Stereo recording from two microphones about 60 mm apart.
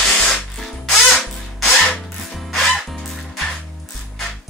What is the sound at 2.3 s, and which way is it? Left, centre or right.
Music, centre.